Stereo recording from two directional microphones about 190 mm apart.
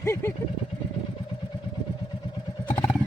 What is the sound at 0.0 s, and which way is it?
Speech, 15° left (ahead or behind).